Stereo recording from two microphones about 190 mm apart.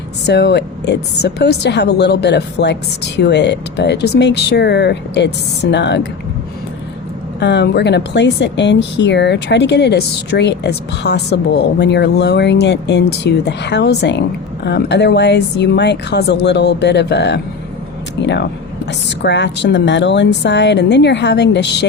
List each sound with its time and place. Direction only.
0.3 s speech: 60° left (ahead or behind)
7.3 s speech: 65° left (ahead or behind)
18.2 s a sound: 65° left (ahead or behind)
18.9 s speech: 65° left (ahead or behind)